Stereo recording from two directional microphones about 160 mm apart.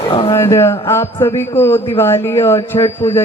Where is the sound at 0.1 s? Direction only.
35° left (ahead or behind).